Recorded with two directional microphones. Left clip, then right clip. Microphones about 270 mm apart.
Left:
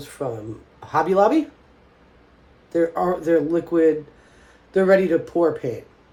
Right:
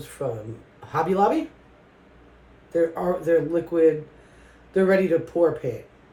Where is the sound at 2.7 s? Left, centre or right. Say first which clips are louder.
Left 2 dB; left.